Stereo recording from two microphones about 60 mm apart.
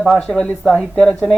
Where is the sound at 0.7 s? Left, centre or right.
Centre.